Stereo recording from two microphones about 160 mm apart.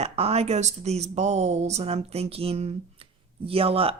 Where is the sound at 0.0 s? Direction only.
40° right (ahead or behind).